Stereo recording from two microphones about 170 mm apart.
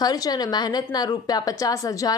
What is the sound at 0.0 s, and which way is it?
A woman's voice, 20° left (ahead or behind).